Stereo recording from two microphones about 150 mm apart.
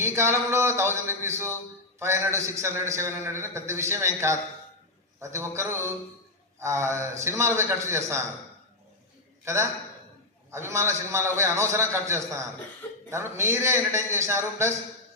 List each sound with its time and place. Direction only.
0.0 s a man's voice: 15° right (ahead or behind)
9.4 s a man's voice: 20° right (ahead or behind)